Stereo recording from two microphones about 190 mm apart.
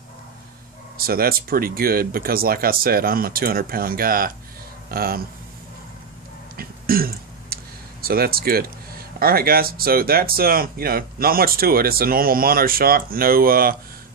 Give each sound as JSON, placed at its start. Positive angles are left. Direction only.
{"t": 0.9, "sound": "speech", "side_deg": -50}
{"t": 6.5, "sound": "throat clearing", "side_deg": -50}
{"t": 9.2, "sound": "speech", "side_deg": -50}